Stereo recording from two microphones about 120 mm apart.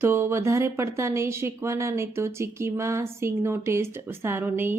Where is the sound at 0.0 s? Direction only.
20° right (ahead or behind).